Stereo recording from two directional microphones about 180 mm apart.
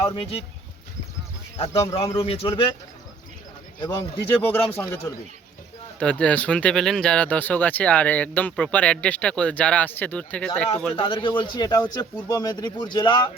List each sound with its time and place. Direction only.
0.0 s a man's voice: 30° left (ahead or behind)
1.5 s a man's voice: 35° left (ahead or behind)
3.8 s speech: 20° left (ahead or behind)
4.3 s speech: 10° left (ahead or behind)
10.9 s speech: 30° left (ahead or behind)